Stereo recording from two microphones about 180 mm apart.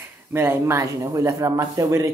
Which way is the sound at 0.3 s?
15° right (ahead or behind).